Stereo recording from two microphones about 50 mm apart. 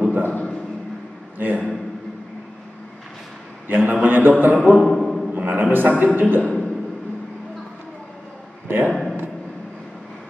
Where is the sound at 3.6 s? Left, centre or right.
Right.